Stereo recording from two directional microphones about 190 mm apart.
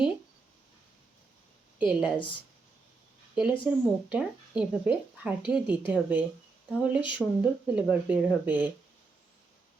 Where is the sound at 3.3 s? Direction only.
5° right (ahead or behind).